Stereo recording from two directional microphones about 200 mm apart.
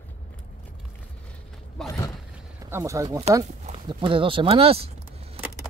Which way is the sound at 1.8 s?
15° left (ahead or behind).